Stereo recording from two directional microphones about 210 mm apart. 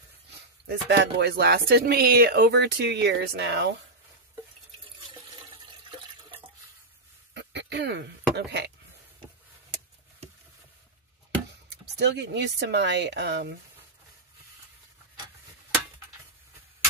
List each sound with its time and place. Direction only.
0.7 s speech: 55° right (ahead or behind)
5.1 s toilet flush: 20° right (ahead or behind)
7.3 s a sound: 55° right (ahead or behind)
8.4 s speech: 55° right (ahead or behind)
12.0 s speech: 55° right (ahead or behind)